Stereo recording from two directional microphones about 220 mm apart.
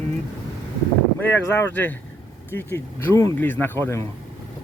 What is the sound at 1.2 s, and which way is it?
Speech, 10° left (ahead or behind).